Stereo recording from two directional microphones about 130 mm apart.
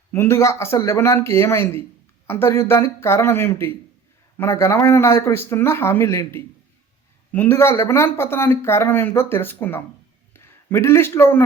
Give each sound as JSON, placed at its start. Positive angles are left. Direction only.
{"t": 0.1, "sound": "speech", "side_deg": 20}